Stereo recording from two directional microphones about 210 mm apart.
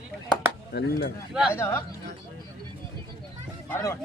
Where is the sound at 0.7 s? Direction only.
50° left (ahead or behind).